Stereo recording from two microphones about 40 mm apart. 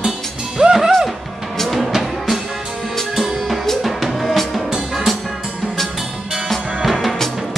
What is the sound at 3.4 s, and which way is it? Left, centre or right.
Music, centre.